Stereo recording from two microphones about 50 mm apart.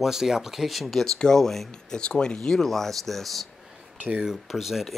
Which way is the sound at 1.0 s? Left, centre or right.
Centre.